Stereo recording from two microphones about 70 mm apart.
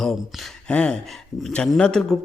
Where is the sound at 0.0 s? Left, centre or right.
Centre.